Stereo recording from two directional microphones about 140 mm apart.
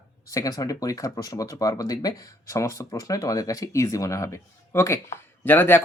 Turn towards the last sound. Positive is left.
turn(degrees=15)  # may be behind; listen again after turning